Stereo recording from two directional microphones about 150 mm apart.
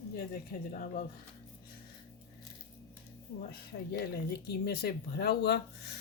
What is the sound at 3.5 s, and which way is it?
Speech, 90° left.